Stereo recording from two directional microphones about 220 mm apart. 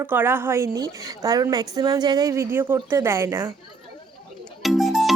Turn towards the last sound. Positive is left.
turn(degrees=0)  # may be behind; listen again after turning